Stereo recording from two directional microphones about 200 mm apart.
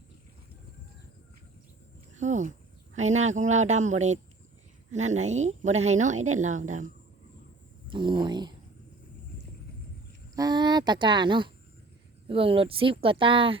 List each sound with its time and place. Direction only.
2.1 s a woman's voice: 35° right (ahead or behind)
7.9 s speech: 25° right (ahead or behind)
10.3 s speech: 20° right (ahead or behind)